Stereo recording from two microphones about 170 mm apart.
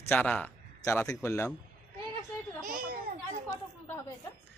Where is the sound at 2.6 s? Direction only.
55° right (ahead or behind).